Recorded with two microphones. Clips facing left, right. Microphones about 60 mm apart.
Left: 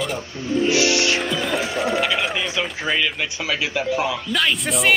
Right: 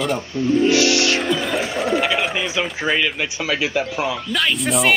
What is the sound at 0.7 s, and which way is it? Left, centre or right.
Speech, centre.